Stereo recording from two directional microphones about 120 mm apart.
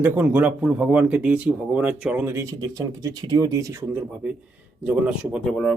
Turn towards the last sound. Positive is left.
turn(degrees=5)  # may be behind; listen again after turning